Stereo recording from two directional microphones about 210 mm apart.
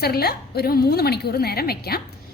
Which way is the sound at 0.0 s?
50° left (ahead or behind).